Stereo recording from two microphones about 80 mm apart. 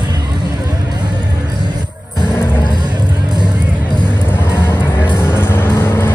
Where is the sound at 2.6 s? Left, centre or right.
Right.